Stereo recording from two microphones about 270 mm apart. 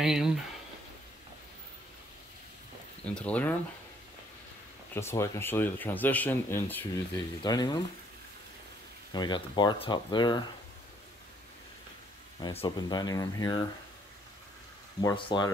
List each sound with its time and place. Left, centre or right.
0.0 s speech: centre
3.2 s speech: centre
4.9 s speech: centre
9.1 s speech: centre
12.4 s speech: centre
15.0 s speech: centre